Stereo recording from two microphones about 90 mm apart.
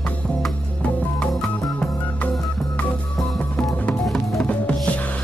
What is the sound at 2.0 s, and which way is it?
Music, 15° left (ahead or behind).